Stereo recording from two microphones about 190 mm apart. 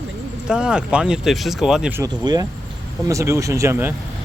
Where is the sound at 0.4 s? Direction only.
5° right (ahead or behind).